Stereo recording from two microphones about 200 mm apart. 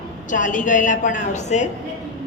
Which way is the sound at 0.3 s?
40° left (ahead or behind).